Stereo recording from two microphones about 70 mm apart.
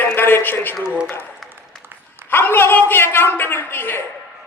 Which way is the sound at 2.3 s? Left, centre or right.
Left.